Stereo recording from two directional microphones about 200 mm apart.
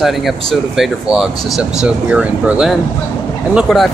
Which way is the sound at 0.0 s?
Centre (ahead or behind).